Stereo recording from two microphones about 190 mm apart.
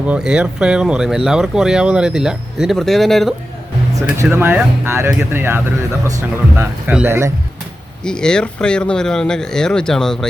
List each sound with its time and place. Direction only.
0.1 s speech: 5° right (ahead or behind)
4.2 s speech: 10° right (ahead or behind)
8.0 s speech: 5° left (ahead or behind)